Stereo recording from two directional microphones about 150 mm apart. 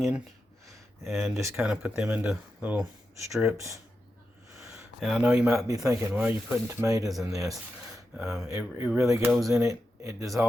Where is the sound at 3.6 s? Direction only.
20° right (ahead or behind).